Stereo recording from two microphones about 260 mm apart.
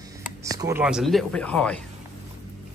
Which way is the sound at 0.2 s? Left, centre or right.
Centre.